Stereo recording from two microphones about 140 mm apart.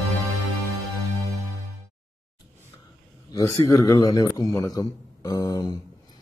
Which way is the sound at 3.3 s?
25° left (ahead or behind).